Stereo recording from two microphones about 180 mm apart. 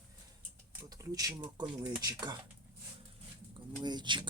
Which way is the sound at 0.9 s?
20° right (ahead or behind).